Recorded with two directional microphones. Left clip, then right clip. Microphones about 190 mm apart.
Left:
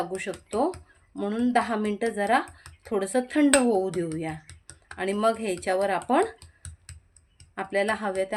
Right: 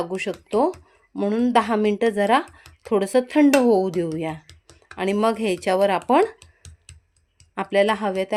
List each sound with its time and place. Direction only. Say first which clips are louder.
0.0 s speech: right 4 dB; 35° right (ahead or behind)
7.5 s speech: right 7 dB; 40° right (ahead or behind)